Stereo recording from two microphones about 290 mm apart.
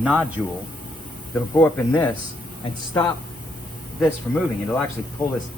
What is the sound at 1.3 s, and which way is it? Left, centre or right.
Speech, centre.